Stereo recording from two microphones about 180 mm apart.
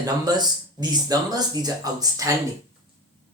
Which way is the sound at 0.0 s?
20° right (ahead or behind).